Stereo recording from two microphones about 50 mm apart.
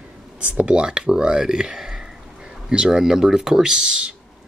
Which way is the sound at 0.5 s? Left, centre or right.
Centre.